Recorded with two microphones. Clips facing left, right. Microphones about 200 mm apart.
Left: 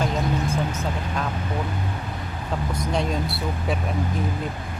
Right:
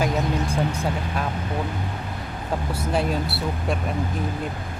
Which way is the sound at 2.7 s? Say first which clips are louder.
Right 1 dB; 5° right (ahead or behind).